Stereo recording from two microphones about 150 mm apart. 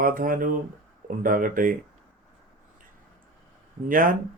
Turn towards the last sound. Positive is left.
turn(degrees=-65)  # may be behind; listen again after turning